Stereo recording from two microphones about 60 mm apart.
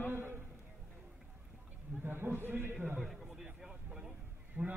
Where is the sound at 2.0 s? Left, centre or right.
Right.